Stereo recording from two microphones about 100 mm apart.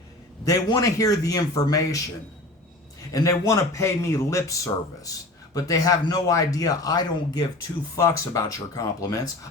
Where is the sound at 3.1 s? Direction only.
30° left (ahead or behind).